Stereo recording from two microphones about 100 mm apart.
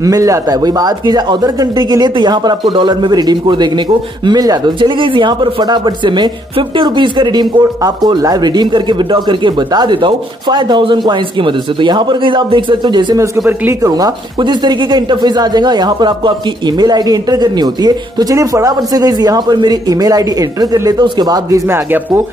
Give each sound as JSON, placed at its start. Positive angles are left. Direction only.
{"t": 0.0, "sound": "speech", "side_deg": -35}
{"t": 4.7, "sound": "speech", "side_deg": -55}
{"t": 13.8, "sound": "speech", "side_deg": -40}